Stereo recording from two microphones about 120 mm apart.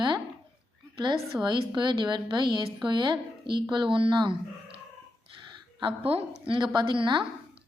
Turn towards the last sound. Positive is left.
turn(degrees=-45)  # may be behind; listen again after turning